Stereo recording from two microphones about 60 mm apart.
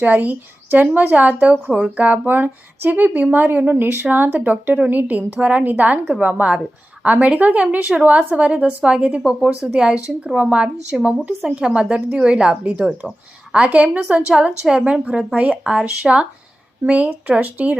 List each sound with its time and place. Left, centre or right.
0.0 s a woman's voice: right